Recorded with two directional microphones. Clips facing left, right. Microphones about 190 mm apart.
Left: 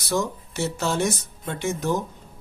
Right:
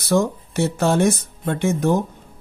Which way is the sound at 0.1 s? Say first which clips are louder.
Right 7 dB; 55° right (ahead or behind).